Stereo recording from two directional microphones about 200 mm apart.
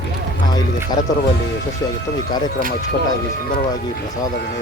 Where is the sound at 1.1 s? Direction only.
15° left (ahead or behind).